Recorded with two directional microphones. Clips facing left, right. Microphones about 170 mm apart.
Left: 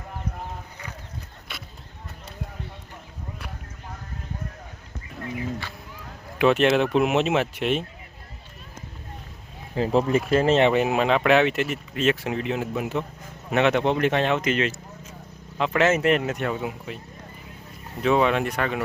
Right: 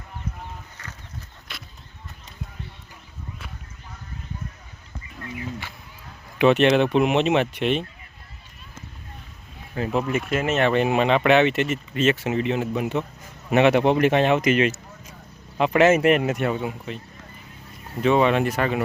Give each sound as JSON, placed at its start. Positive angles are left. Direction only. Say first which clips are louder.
{"t": 6.4, "sound": "speech", "louder": "right 2 dB", "side_deg": 0}
{"t": 9.7, "sound": "speech", "louder": "left 3 dB", "side_deg": 30}
{"t": 10.7, "sound": "speech", "louder": "right 1 dB", "side_deg": 5}
{"t": 16.6, "sound": "speech", "louder": "right 2 dB", "side_deg": 5}
{"t": 18.0, "sound": "speech", "louder": "right 2 dB", "side_deg": 0}